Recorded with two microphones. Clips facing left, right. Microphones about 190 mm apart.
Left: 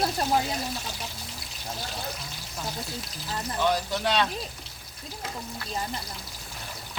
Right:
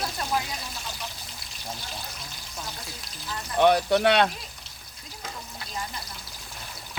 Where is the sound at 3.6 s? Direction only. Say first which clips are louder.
Right 7 dB; 65° right (ahead or behind).